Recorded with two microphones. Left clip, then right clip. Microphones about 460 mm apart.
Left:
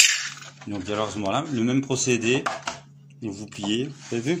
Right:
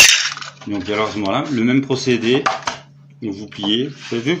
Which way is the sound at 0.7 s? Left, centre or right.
Right.